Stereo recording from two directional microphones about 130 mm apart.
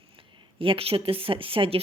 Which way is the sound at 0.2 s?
40° right (ahead or behind).